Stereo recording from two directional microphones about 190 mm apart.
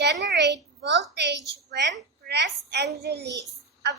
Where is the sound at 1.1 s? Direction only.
65° right (ahead or behind).